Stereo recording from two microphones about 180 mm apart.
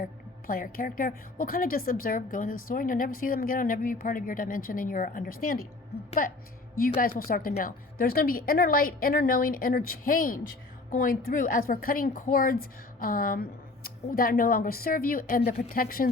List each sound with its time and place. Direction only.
0.0 s a woman's voice: 50° left (ahead or behind)